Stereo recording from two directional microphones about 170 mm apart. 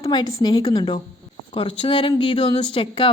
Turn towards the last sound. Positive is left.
turn(degrees=35)  # may be behind; listen again after turning